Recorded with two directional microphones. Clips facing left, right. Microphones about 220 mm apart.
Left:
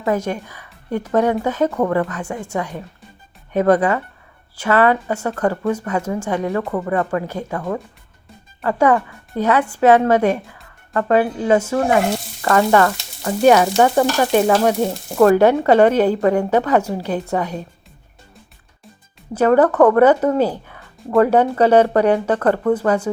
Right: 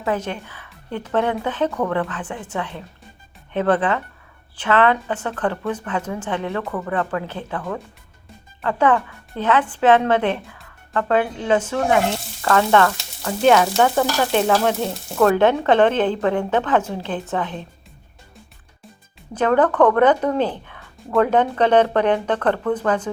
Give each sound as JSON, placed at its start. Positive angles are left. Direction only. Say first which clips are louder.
{"t": 0.0, "sound": "frying", "louder": "left 4 dB", "side_deg": 10}
{"t": 6.7, "sound": "speech", "louder": "left 4 dB", "side_deg": 20}
{"t": 6.9, "sound": "frying", "louder": "left 3 dB", "side_deg": 10}
{"t": 19.3, "sound": "frying", "louder": "left 4 dB", "side_deg": 10}